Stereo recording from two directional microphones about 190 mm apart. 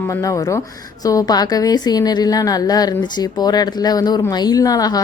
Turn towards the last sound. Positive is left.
turn(degrees=20)  # may be behind; listen again after turning